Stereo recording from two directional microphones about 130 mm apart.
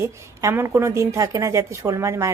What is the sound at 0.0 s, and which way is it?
A woman's voice, 20° right (ahead or behind).